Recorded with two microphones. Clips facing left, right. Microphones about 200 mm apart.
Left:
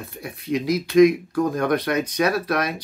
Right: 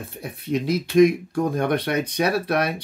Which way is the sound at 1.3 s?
30° right (ahead or behind).